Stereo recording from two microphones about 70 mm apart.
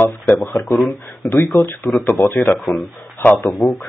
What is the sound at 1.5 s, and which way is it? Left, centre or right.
Speech, left.